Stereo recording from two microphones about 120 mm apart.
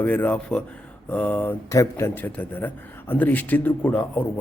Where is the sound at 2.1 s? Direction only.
15° left (ahead or behind).